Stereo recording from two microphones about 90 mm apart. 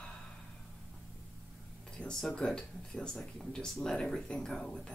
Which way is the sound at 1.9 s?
10° left (ahead or behind).